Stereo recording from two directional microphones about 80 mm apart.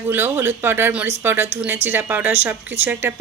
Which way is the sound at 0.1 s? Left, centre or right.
Right.